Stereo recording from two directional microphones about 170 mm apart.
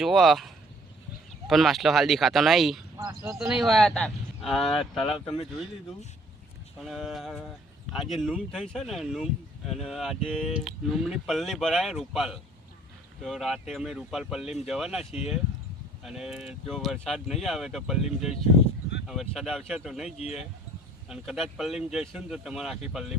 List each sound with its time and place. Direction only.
0.0 s speech: centre (ahead or behind)
3.0 s speech: 20° right (ahead or behind)
3.3 s speech: 5° right (ahead or behind)
5.0 s speech: 30° left (ahead or behind)
6.7 s speech: centre (ahead or behind)